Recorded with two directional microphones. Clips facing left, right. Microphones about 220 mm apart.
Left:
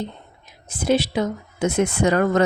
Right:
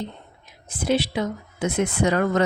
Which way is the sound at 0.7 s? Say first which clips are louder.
Left 3 dB; 45° left (ahead or behind).